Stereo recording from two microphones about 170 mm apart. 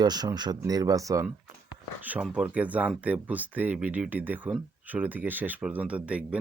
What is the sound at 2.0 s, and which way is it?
Speech, 5° right (ahead or behind).